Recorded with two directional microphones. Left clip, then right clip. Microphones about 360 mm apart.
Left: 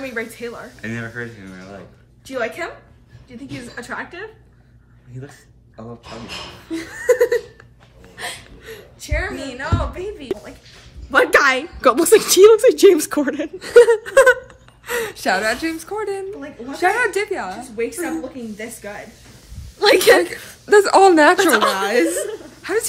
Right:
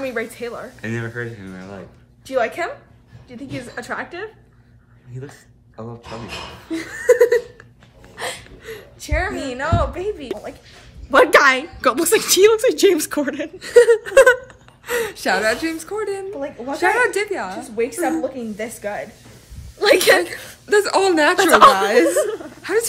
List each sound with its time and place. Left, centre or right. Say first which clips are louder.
0.0 s a woman's voice: right 2 dB; centre
6.7 s chuckle: right 2 dB; centre
8.2 s a sound: right 2 dB; centre
9.0 s speech: right 2 dB; centre
10.2 s a woman's voice: left 1 dB; centre
17.8 s speech: right 5 dB; centre
19.8 s a woman's voice: left 1 dB; centre
20.6 s speech: left 5 dB; centre
21.7 s a woman's voice: right 3 dB; centre